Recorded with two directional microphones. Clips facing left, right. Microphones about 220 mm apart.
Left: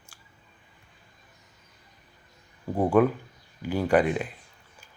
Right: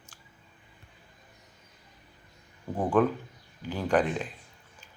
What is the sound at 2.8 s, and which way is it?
Speech, 10° left (ahead or behind).